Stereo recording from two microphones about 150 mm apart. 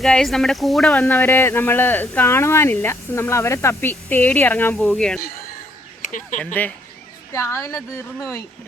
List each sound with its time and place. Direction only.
0.0 s speech: 5° left (ahead or behind)
1.0 s speech: 15° left (ahead or behind)
6.0 s speech: 60° left (ahead or behind)
6.4 s speech: 10° left (ahead or behind)